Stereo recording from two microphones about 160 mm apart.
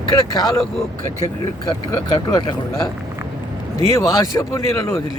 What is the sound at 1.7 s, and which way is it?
Speech, 25° left (ahead or behind).